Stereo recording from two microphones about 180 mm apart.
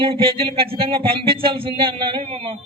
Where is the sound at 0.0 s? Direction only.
30° right (ahead or behind).